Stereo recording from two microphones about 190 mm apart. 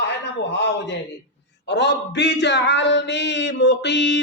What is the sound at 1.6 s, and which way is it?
Speech, 65° left (ahead or behind).